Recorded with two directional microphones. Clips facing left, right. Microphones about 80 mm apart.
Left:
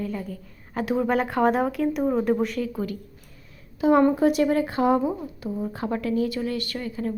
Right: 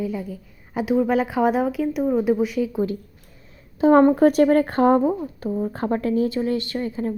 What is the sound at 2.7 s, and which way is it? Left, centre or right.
Speech, right.